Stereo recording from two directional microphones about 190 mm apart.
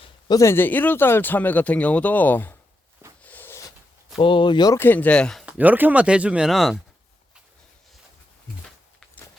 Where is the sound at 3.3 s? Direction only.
10° left (ahead or behind).